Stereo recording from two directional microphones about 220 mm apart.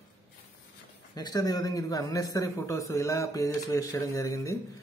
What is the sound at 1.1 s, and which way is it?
Speech, 15° left (ahead or behind).